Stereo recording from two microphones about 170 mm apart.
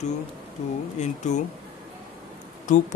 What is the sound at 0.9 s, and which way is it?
Speech, 45° left (ahead or behind).